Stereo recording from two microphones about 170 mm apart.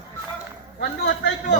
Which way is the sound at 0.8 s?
80° left.